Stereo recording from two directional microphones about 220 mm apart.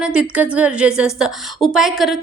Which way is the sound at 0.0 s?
5° right (ahead or behind).